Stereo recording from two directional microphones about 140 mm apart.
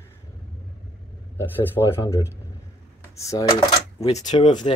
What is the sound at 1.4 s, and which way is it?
Speech, 15° left (ahead or behind).